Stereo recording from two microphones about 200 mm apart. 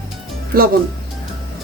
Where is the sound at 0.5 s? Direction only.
50° right (ahead or behind).